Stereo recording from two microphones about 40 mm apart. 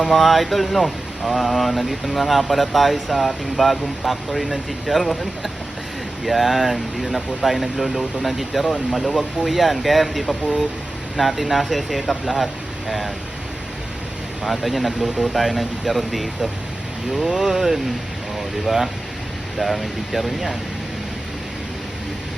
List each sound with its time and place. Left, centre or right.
0.0 s speech: centre
1.8 s speech: centre
6.2 s speech: centre
10.4 s speech: right
11.2 s speech: centre
14.4 s speech: centre